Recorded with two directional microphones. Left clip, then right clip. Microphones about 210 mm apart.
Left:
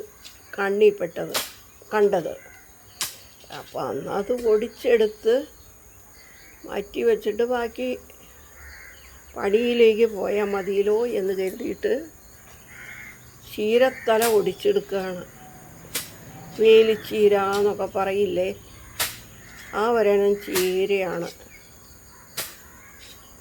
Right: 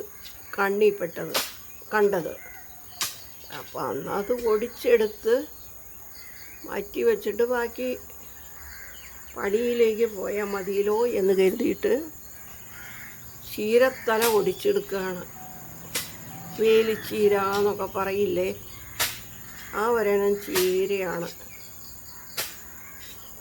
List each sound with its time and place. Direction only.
0.5 s speech: centre (ahead or behind)
3.0 s cricket: 30° left (ahead or behind)
3.5 s speech: centre (ahead or behind)
6.7 s speech: centre (ahead or behind)
9.3 s speech: 10° left (ahead or behind)
10.5 s speech: centre (ahead or behind)
11.3 s speech: 30° right (ahead or behind)
13.5 s speech: centre (ahead or behind)
16.6 s speech: 5° left (ahead or behind)
19.0 s crow: 35° left (ahead or behind)
19.7 s speech: 10° left (ahead or behind)